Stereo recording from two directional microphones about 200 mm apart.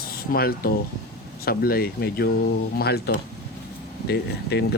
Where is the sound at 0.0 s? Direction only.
50° left (ahead or behind).